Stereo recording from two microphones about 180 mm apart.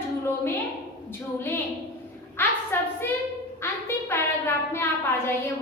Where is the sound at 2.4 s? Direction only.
10° left (ahead or behind).